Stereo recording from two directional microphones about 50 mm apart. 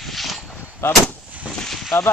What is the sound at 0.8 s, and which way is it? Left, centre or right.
Artillery fire, left.